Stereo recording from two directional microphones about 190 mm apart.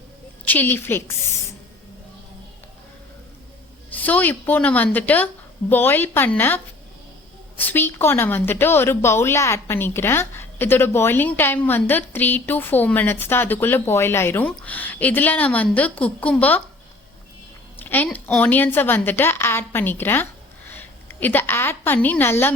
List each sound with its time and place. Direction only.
0.4 s a woman's voice: 10° left (ahead or behind)
3.9 s a woman's voice: 10° left (ahead or behind)
17.7 s a woman's voice: 10° left (ahead or behind)